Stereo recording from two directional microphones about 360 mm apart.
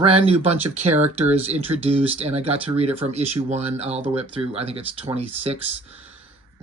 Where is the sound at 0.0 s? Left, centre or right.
Centre.